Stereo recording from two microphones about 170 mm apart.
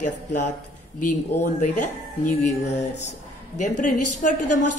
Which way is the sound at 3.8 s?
50° left (ahead or behind).